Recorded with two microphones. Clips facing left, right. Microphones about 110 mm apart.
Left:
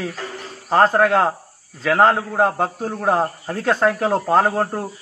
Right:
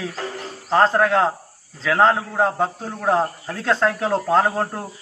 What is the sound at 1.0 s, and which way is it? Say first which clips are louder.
Speech: left 2 dB; 55° left (ahead or behind).